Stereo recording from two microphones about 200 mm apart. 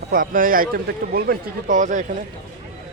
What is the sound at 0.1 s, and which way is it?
Speech, 45° right (ahead or behind).